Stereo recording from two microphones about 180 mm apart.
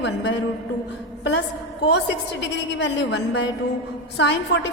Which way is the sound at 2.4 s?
75° left (ahead or behind).